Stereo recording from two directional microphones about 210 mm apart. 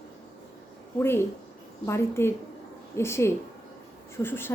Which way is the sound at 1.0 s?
10° left (ahead or behind).